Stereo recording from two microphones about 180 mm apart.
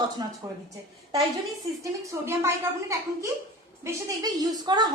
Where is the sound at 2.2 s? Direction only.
15° right (ahead or behind).